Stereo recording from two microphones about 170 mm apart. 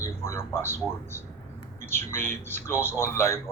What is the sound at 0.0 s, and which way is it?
Speech, 15° left (ahead or behind).